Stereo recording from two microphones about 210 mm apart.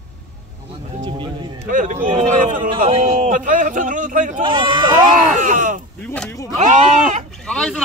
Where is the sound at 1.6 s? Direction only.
40° right (ahead or behind).